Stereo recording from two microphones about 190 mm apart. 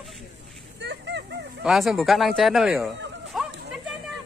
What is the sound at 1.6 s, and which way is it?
Speech, centre (ahead or behind).